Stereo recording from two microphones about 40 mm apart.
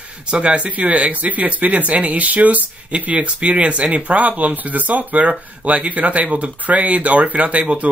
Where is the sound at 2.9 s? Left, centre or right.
Right.